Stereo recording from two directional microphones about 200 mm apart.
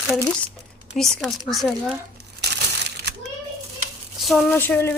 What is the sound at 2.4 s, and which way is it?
Crushing, 55° right (ahead or behind).